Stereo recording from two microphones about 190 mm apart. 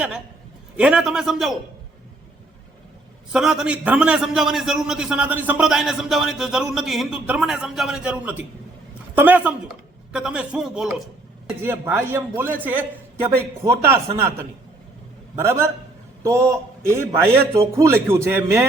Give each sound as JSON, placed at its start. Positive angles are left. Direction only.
{"t": 0.8, "sound": "a man's voice", "side_deg": -5}
{"t": 3.3, "sound": "a man's voice", "side_deg": -5}
{"t": 15.4, "sound": "a man's voice", "side_deg": -15}